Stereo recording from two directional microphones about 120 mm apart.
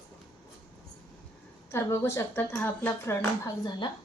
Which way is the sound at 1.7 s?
20° left (ahead or behind).